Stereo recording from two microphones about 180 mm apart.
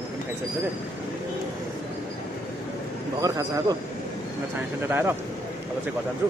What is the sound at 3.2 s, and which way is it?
Speech, 20° right (ahead or behind).